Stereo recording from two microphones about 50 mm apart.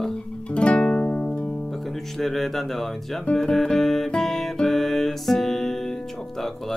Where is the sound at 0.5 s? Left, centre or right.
Left.